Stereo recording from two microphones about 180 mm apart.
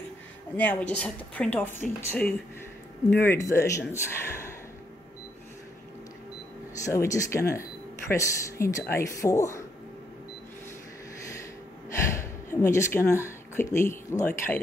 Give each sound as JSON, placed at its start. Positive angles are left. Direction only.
{"t": 0.6, "sound": "speech", "side_deg": 10}
{"t": 6.8, "sound": "speech", "side_deg": 15}
{"t": 12.0, "sound": "speech", "side_deg": 15}